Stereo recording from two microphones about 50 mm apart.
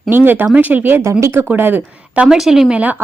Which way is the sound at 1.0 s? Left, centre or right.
Right.